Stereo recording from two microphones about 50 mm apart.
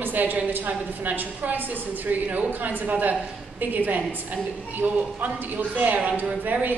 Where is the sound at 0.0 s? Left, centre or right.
Right.